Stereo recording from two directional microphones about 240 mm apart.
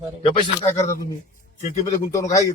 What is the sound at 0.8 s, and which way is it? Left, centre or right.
Speech, left.